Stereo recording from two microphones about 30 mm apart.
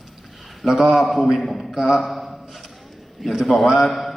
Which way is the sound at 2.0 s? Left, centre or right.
Centre.